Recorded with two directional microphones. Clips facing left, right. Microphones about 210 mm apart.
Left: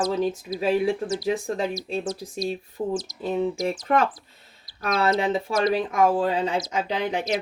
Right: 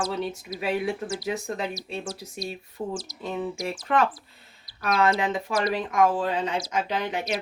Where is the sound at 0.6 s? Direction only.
30° left (ahead or behind).